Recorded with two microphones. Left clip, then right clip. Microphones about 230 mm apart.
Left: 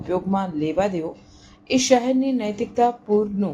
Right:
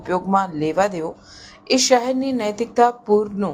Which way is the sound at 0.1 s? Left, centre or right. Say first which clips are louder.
Right 5 dB; centre.